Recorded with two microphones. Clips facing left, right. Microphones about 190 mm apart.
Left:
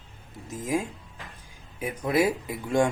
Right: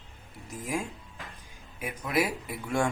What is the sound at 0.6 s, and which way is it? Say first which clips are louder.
Speech: left 5 dB; 20° left (ahead or behind).